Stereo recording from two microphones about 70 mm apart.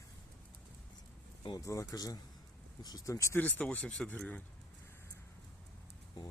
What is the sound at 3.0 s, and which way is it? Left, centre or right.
Speech, left.